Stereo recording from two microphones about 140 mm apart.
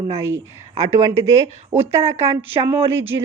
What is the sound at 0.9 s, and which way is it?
A woman's voice, 20° right (ahead or behind).